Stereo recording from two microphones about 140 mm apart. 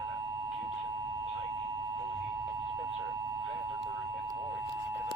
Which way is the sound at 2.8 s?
25° right (ahead or behind).